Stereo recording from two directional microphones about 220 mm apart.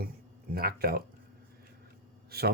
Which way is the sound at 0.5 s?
45° right (ahead or behind).